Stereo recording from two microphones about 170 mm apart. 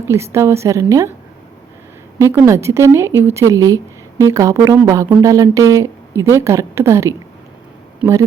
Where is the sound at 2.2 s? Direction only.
15° right (ahead or behind).